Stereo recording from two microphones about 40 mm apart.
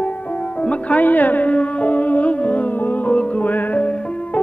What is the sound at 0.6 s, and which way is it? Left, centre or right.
Speech, left.